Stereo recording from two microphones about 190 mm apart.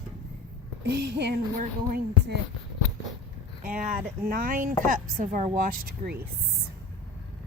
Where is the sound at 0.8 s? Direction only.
65° right (ahead or behind).